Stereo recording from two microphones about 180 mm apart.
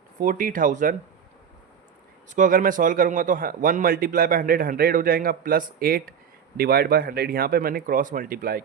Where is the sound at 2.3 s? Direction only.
45° right (ahead or behind).